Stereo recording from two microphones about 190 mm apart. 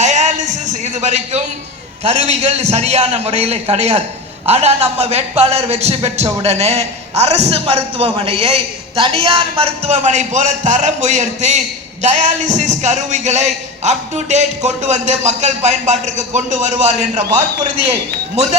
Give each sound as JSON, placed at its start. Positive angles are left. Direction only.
{"t": 0.0, "sound": "a man's voice", "side_deg": -40}